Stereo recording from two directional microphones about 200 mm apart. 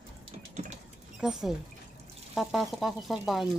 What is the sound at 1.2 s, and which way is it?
Speech, 5° right (ahead or behind).